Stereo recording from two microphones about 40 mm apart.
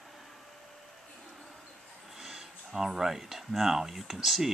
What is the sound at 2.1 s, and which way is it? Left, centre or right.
Speech, centre.